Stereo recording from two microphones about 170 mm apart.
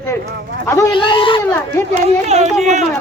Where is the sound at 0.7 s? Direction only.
25° left (ahead or behind).